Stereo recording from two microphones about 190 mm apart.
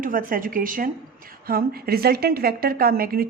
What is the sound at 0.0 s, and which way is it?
A woman's voice, 45° right (ahead or behind).